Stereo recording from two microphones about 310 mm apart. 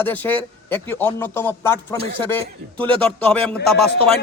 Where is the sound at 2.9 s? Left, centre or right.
Centre.